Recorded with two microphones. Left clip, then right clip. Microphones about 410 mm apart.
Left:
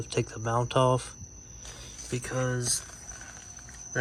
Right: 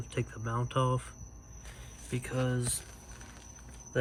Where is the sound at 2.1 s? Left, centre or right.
Centre.